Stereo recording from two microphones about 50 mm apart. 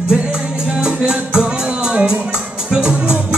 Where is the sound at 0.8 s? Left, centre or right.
Centre.